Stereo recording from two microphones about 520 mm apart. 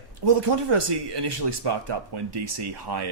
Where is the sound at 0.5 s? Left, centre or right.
Right.